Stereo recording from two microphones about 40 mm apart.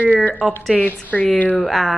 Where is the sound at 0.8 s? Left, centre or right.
Left.